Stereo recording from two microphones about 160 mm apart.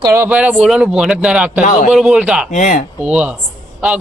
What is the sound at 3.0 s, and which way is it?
Speech, 10° right (ahead or behind).